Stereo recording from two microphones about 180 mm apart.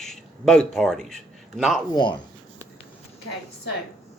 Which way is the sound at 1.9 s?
25° left (ahead or behind).